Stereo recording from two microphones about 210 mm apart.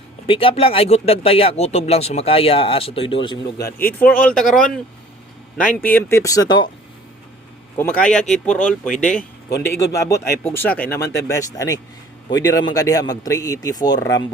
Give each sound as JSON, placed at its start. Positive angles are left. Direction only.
{"t": 0.3, "sound": "speech", "side_deg": 25}
{"t": 3.9, "sound": "speech", "side_deg": 5}
{"t": 7.8, "sound": "speech", "side_deg": 5}